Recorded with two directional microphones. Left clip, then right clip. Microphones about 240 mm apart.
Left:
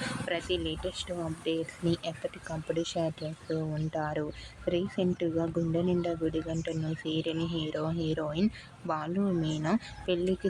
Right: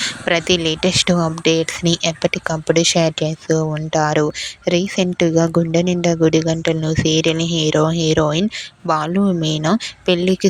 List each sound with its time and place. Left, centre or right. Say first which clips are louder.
0.3 s speech: right 17 dB; right